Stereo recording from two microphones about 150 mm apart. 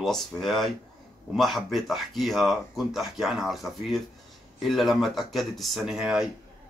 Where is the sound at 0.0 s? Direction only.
Centre (ahead or behind).